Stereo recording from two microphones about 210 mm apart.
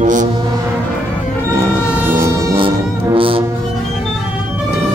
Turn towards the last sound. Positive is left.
turn(degrees=-25)  # may be behind; listen again after turning